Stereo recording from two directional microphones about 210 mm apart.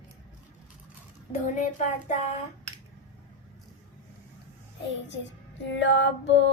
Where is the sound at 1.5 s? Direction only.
35° left (ahead or behind).